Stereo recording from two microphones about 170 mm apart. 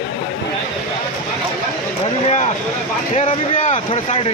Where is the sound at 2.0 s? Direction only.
40° left (ahead or behind).